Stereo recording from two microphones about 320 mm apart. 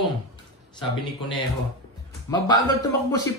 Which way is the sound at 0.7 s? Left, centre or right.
Centre.